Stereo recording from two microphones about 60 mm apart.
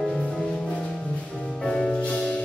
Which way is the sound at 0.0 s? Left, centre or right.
Centre.